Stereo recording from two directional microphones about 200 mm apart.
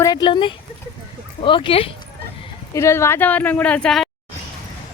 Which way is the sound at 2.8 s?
15° left (ahead or behind).